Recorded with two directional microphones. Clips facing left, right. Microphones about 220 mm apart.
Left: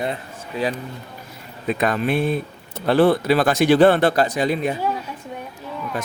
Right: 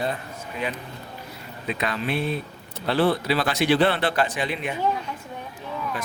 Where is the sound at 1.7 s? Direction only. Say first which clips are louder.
Left 6 dB; 50° left (ahead or behind).